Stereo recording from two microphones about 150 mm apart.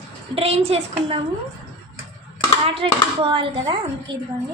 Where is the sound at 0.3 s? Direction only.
40° right (ahead or behind).